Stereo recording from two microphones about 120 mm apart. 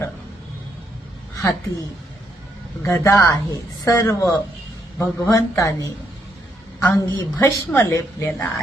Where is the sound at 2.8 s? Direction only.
25° left (ahead or behind).